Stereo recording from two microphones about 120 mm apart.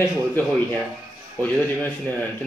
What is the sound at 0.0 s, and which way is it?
Speech, 15° left (ahead or behind).